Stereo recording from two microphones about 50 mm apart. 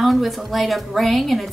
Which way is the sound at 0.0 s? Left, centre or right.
Centre.